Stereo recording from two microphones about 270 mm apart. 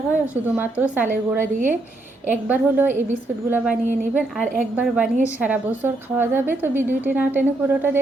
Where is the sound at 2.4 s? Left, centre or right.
Centre.